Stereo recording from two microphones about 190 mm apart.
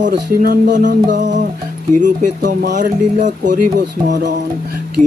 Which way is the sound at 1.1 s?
40° right (ahead or behind).